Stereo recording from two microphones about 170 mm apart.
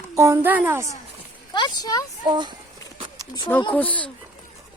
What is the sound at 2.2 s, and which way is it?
Speech, 25° right (ahead or behind).